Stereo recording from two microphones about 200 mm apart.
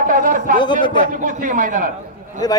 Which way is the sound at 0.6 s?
25° left (ahead or behind).